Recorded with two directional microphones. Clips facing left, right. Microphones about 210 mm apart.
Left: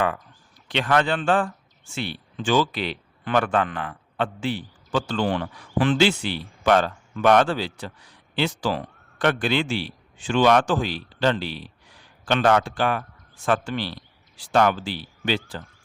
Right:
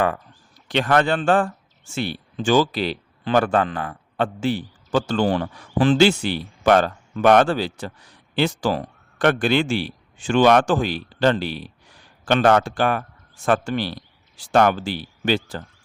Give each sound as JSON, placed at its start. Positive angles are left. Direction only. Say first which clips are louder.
{"t": 0.7, "sound": "a man's voice", "louder": "right 3 dB", "side_deg": -45}